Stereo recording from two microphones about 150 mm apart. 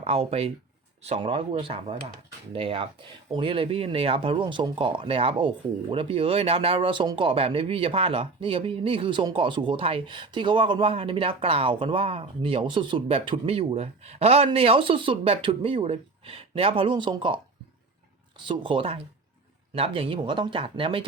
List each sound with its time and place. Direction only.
0.0 s speech: 40° right (ahead or behind)
18.4 s speech: 35° right (ahead or behind)